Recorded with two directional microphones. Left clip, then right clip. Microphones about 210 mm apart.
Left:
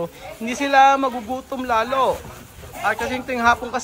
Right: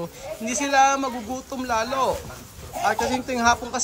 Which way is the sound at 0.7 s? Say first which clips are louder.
Left 5 dB; 15° right (ahead or behind).